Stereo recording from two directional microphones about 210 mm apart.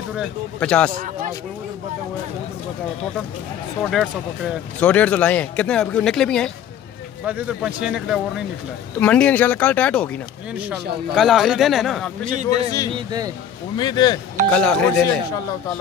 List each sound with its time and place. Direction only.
0.1 s speech: centre (ahead or behind)
4.7 s speech: 5° left (ahead or behind)
10.5 s speech: 5° right (ahead or behind)
12.4 s speech: 15° left (ahead or behind)
12.9 s speech: 20° right (ahead or behind)
13.7 s speech: 20° left (ahead or behind)
14.5 s speech: 5° left (ahead or behind)